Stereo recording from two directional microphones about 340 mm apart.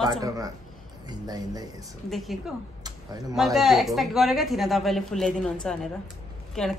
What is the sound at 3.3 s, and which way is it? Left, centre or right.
A woman's voice, centre.